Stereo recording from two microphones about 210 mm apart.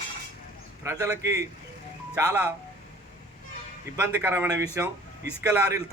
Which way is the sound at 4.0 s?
10° right (ahead or behind).